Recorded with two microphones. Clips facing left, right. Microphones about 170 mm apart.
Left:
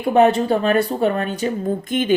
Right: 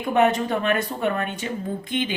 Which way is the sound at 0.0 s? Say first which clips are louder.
Left 5 dB; 35° left (ahead or behind).